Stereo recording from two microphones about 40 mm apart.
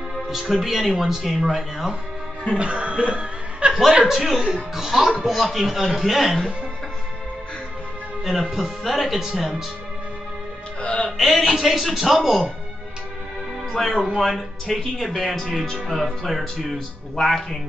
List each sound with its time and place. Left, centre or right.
0.3 s speech: centre
2.5 s speech: right
3.7 s speech: centre
8.2 s speech: centre
10.8 s music: left
11.1 s speech: centre
13.7 s speech: centre